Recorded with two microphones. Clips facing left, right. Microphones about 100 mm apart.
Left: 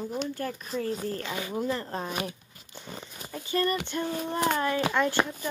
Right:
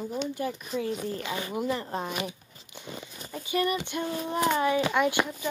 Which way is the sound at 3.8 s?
10° right (ahead or behind).